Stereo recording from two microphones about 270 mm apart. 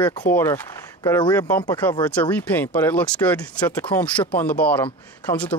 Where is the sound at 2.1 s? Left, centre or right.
Centre.